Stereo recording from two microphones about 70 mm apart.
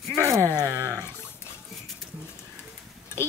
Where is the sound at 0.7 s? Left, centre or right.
Right.